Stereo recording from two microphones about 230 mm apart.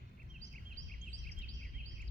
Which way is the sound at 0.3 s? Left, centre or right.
Right.